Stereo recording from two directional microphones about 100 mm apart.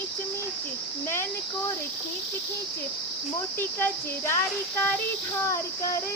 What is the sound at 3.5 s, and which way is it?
Speech, 25° left (ahead or behind).